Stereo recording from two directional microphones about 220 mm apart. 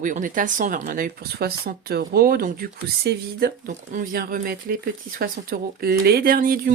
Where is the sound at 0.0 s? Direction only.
35° right (ahead or behind).